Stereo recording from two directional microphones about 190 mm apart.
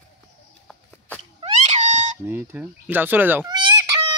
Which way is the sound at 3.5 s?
20° right (ahead or behind).